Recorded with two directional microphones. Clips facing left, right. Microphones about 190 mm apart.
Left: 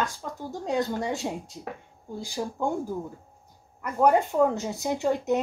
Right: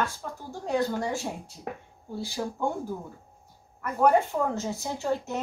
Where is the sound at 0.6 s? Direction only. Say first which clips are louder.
Even; 20° left (ahead or behind).